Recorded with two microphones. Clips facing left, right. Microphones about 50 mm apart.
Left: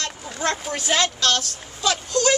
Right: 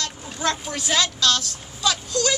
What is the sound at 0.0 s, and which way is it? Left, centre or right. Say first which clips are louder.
A child's voice: even; left.